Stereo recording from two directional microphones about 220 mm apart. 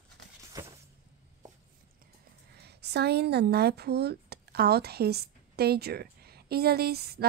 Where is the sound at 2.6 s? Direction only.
50° right (ahead or behind).